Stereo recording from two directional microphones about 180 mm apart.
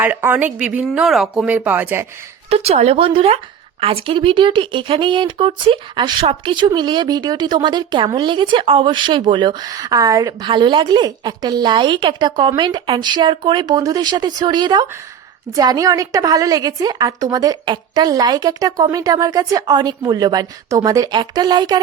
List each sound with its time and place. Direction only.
0.0 s speech: 10° right (ahead or behind)
2.5 s a woman's voice: 35° right (ahead or behind)